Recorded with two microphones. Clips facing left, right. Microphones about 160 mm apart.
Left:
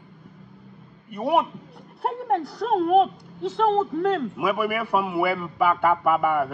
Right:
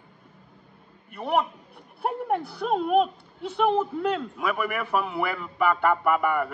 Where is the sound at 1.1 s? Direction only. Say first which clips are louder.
Left 3 dB; 10° left (ahead or behind).